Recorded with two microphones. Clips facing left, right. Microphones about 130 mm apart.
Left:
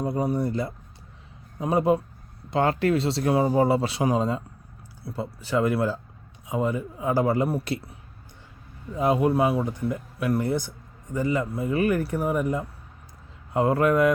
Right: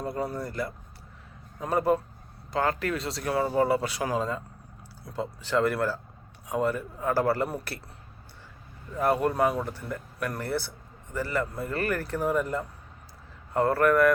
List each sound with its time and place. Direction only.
0.0 s speech: 20° left (ahead or behind)
5.0 s speech: 5° left (ahead or behind)